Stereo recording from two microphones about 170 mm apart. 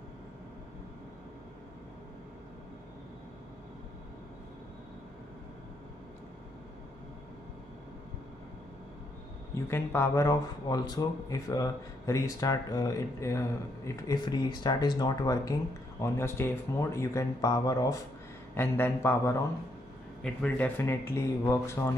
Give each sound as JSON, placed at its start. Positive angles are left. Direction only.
{"t": 9.7, "sound": "speech", "side_deg": 15}
{"t": 20.4, "sound": "speech", "side_deg": 10}